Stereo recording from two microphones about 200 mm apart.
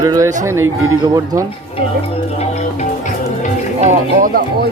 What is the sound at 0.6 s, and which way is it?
Speech, 90° right.